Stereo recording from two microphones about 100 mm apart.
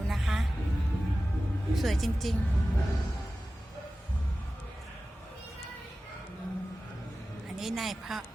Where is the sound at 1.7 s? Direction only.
Centre (ahead or behind).